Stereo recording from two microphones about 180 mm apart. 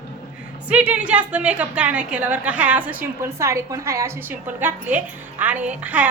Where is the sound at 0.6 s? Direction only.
5° right (ahead or behind).